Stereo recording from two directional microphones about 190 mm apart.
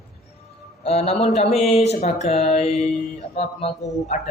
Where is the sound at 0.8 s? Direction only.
30° left (ahead or behind).